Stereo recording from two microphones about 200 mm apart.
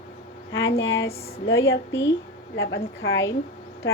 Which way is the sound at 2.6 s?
75° left (ahead or behind).